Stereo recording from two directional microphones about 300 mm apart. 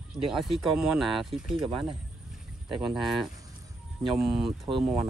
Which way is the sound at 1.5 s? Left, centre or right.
Centre.